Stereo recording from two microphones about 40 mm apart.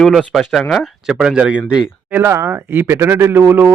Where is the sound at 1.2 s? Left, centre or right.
Right.